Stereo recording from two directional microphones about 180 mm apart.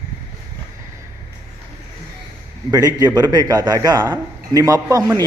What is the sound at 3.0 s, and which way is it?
A man's voice, 20° right (ahead or behind).